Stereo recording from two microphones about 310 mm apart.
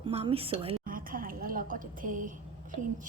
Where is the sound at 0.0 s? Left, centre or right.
Centre.